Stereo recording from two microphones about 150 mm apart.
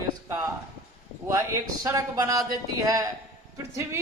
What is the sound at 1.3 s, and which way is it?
A man's voice, 20° right (ahead or behind).